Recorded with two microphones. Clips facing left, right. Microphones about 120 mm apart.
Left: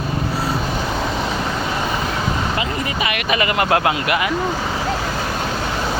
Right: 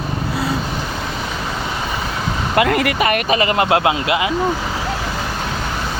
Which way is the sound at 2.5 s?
70° right (ahead or behind).